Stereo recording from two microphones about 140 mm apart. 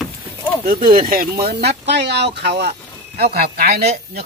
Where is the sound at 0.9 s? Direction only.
90° right.